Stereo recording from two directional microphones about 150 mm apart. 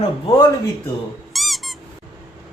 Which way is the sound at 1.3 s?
Centre (ahead or behind).